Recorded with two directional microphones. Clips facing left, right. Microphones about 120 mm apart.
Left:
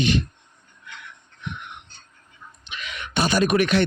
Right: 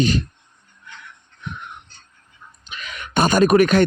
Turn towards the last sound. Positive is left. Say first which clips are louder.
# right 5 dB
turn(degrees=-45)  # may be behind; listen again after turning